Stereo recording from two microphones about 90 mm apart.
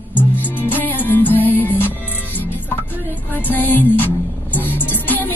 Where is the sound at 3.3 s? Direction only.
20° left (ahead or behind).